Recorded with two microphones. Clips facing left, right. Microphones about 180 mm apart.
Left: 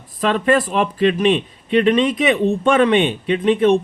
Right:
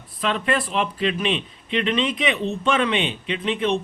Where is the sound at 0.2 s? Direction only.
45° left (ahead or behind).